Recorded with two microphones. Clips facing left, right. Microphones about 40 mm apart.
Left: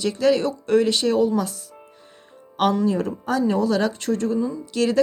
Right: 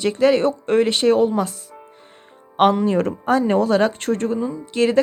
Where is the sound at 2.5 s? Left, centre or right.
Right.